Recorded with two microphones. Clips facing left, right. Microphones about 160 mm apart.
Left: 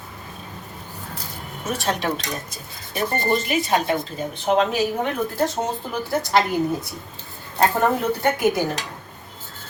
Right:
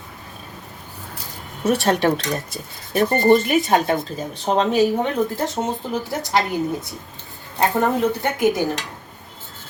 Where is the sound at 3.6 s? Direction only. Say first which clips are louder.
Right 3 dB; 40° right (ahead or behind).